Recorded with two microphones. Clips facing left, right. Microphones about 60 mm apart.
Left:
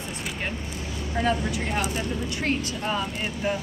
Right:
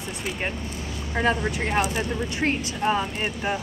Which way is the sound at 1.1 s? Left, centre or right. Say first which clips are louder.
Right 2 dB; right.